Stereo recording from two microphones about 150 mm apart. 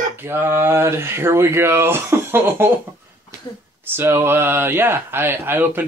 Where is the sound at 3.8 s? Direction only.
15° right (ahead or behind).